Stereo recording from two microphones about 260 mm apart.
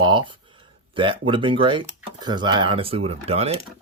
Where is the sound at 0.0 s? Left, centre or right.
Centre.